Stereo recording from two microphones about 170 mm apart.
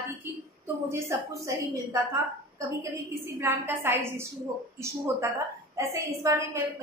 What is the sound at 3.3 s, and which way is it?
A woman's voice, 15° right (ahead or behind).